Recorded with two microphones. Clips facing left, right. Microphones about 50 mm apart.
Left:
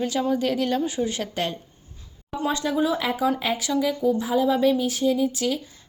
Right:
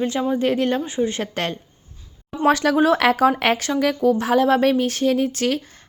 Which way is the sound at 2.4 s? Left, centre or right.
Right.